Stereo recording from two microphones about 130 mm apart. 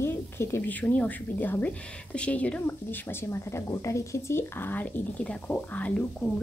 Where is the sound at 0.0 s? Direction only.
20° left (ahead or behind).